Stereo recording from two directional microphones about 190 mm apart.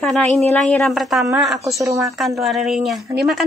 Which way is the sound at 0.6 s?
Centre (ahead or behind).